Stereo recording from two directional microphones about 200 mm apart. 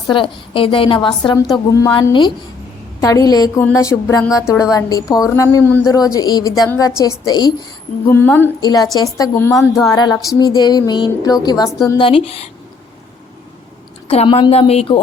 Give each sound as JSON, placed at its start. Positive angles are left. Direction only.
{"t": 0.1, "sound": "a woman's voice", "side_deg": 25}
{"t": 14.1, "sound": "a woman's voice", "side_deg": 30}